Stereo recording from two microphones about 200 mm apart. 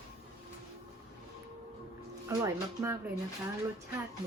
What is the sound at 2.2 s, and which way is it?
Speech, 15° right (ahead or behind).